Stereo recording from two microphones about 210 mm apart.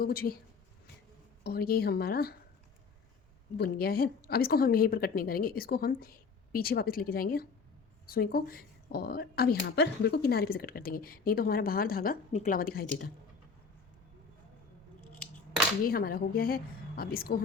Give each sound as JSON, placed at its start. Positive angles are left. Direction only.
{"t": 0.0, "sound": "speech", "side_deg": 45}
{"t": 1.5, "sound": "speech", "side_deg": 45}
{"t": 3.6, "sound": "speech", "side_deg": 45}
{"t": 15.9, "sound": "speech", "side_deg": 45}